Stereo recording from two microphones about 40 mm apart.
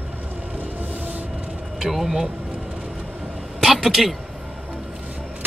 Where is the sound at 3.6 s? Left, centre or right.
Centre.